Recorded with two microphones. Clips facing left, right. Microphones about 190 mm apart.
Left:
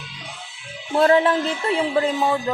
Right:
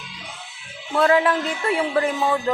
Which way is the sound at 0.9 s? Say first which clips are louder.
Left 2 dB; 30° left (ahead or behind).